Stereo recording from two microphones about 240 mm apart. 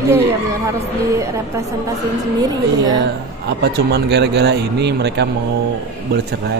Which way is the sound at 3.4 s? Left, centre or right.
Right.